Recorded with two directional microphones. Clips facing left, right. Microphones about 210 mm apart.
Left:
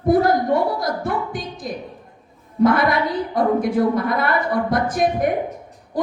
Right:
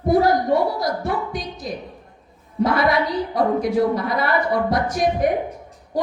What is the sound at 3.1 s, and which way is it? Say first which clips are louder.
A woman's voice: left 1 dB; 50° left (ahead or behind).